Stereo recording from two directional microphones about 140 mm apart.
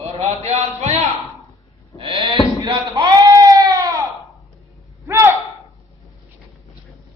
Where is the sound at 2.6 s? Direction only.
30° right (ahead or behind).